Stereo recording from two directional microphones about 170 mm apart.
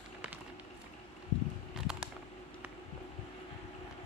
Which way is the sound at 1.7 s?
5° right (ahead or behind).